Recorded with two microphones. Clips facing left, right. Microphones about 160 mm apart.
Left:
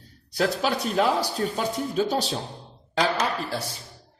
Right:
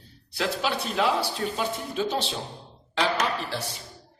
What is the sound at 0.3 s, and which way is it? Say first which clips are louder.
Speech: left 3 dB; 40° left (ahead or behind).